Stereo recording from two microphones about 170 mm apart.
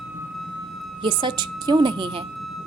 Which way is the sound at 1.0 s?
25° right (ahead or behind).